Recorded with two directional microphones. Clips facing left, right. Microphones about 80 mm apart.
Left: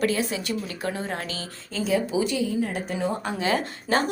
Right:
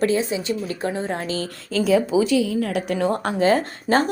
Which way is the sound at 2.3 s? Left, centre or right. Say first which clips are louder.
Right 5 dB; right.